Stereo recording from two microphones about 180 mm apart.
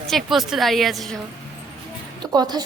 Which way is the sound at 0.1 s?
Centre (ahead or behind).